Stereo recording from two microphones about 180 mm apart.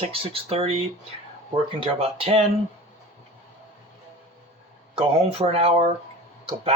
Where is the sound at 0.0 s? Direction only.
35° right (ahead or behind).